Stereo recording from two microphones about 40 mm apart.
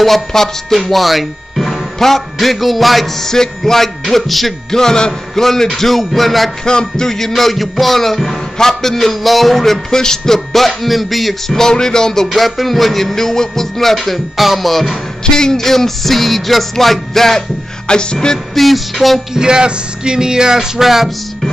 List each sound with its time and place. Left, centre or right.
0.0 s music: centre
3.3 s music: centre
4.7 s music: centre
6.6 s music: centre
11.5 s music: centre
12.3 s music: centre
14.0 s music: centre
15.2 s music: centre
17.8 s speech: left
18.5 s music: centre
19.3 s speech: right